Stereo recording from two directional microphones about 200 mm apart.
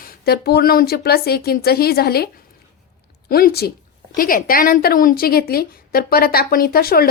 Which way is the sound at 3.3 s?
50° left (ahead or behind).